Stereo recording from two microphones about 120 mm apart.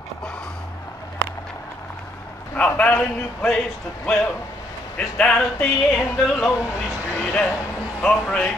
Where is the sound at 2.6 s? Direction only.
10° left (ahead or behind).